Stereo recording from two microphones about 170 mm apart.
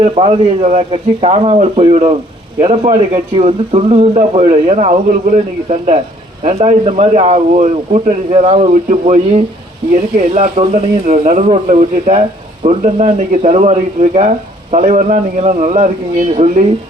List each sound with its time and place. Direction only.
0.0 s speech: 35° right (ahead or behind)
11.4 s speech: 35° right (ahead or behind)